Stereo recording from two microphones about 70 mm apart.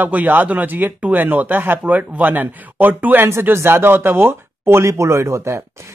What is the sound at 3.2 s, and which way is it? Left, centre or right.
Speech, right.